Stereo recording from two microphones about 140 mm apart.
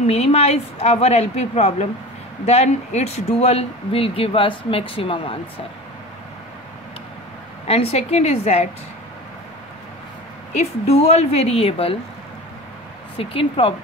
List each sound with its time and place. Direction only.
0.0 s speech: 50° left (ahead or behind)
7.6 s speech: 45° left (ahead or behind)
10.5 s speech: 50° left (ahead or behind)
13.2 s speech: 40° left (ahead or behind)